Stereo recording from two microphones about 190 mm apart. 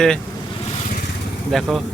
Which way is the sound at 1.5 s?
Centre (ahead or behind).